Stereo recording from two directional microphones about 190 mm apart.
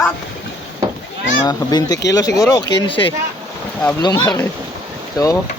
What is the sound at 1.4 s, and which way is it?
Speech, 20° left (ahead or behind).